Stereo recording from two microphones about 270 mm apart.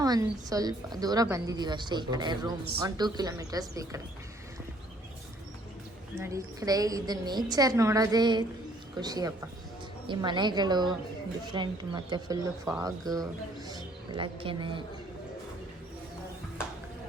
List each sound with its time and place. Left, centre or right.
0.0 s a woman's voice: centre
6.2 s a woman's voice: centre
12.6 s speech: centre